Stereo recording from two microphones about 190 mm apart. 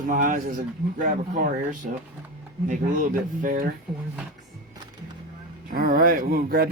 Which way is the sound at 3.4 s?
45° right (ahead or behind).